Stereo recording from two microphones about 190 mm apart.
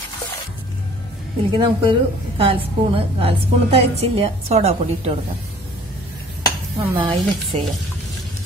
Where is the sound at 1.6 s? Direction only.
30° right (ahead or behind).